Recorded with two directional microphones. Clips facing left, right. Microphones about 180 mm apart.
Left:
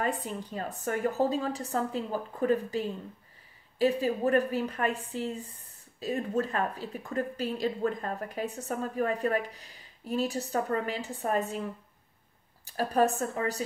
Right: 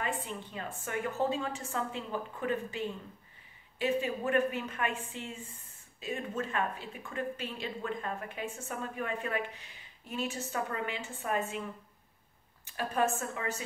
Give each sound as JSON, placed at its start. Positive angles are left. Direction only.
{"t": 0.0, "sound": "a woman's voice", "side_deg": 40}
{"t": 12.6, "sound": "a woman's voice", "side_deg": 35}